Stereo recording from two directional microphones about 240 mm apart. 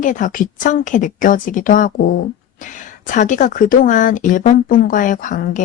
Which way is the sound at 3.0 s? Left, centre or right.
Left.